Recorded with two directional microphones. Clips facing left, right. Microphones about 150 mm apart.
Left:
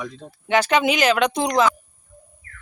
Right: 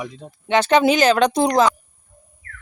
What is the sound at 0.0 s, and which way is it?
Speech, 15° right (ahead or behind).